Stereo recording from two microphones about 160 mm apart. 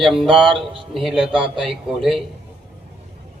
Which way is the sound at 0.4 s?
30° right (ahead or behind).